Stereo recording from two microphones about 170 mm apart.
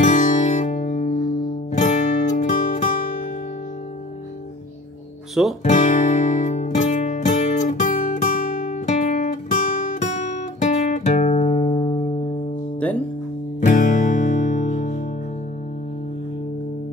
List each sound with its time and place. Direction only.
0.0 s music: 45° left (ahead or behind)
5.6 s music: 45° left (ahead or behind)
13.7 s music: 50° left (ahead or behind)